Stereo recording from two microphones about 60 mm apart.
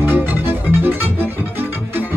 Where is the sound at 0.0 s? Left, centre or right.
Right.